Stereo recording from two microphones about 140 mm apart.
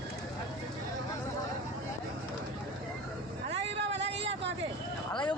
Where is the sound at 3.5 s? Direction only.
50° right (ahead or behind).